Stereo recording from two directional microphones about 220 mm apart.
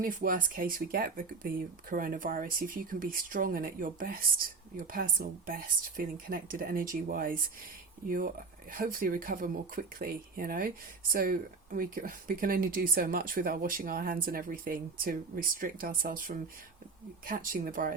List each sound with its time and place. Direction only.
0.0 s speech: 35° right (ahead or behind)